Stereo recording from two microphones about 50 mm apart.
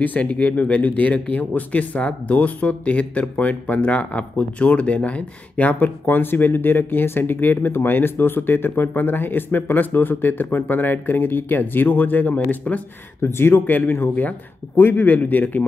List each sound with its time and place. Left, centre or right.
0.2 s speech: left
13.2 s speech: left
13.7 s speech: left
14.8 s a man's voice: left
15.0 s speech: left